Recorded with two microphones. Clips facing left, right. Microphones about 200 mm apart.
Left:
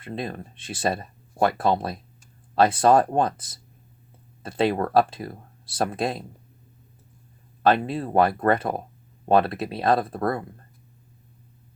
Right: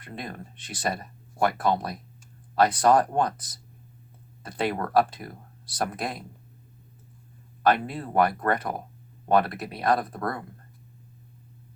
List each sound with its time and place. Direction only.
0.0 s speech: 25° left (ahead or behind)
7.6 s speech: 25° left (ahead or behind)